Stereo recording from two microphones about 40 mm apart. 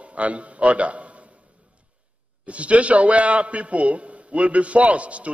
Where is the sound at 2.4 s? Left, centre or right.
Right.